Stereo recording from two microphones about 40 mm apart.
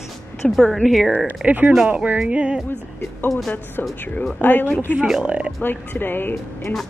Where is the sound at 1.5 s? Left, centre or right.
Right.